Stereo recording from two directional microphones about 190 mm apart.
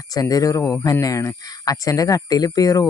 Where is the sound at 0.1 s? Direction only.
20° left (ahead or behind).